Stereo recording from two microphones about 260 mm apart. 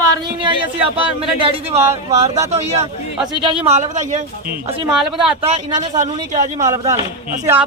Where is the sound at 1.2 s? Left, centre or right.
Right.